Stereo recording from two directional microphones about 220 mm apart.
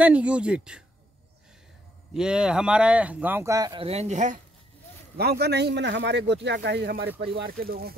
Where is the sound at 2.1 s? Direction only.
5° right (ahead or behind); by 4.4 s 30° right (ahead or behind).